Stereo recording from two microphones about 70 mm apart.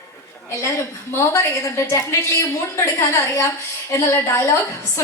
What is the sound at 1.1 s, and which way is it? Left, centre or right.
A woman's voice, left.